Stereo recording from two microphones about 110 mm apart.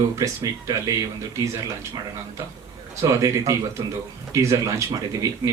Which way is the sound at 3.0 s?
30° right (ahead or behind).